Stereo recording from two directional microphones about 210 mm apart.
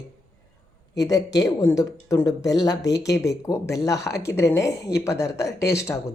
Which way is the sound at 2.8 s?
55° left (ahead or behind).